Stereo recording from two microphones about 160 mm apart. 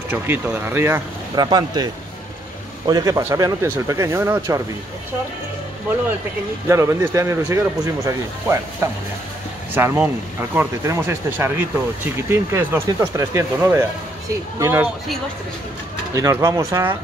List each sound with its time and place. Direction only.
0.1 s speech: 15° right (ahead or behind)
1.3 s speech: 25° right (ahead or behind)
2.9 s speech: 20° right (ahead or behind)
6.7 s speech: 20° right (ahead or behind)
16.2 s speech: 20° right (ahead or behind)